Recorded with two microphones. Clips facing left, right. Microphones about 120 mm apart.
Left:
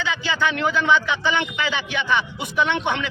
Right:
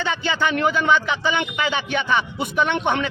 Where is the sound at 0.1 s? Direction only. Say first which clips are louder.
Right 1 dB; 45° right (ahead or behind).